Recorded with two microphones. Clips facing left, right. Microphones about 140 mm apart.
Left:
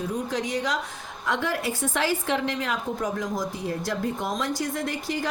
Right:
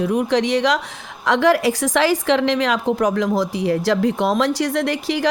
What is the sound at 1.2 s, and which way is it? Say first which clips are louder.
A woman's voice: right 11 dB; 90° right.